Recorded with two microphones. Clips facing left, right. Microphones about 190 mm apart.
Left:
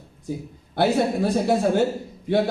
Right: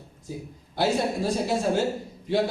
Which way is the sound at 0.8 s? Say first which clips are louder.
Left 4 dB; 60° left (ahead or behind).